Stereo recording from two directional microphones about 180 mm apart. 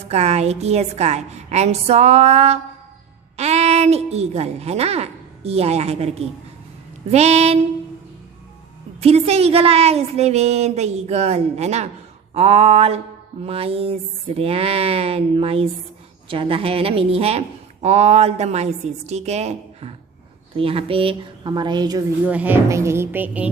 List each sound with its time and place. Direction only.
0.1 s a woman's voice: 35° right (ahead or behind)
9.0 s a woman's voice: 35° right (ahead or behind)
22.3 s speech: 10° right (ahead or behind)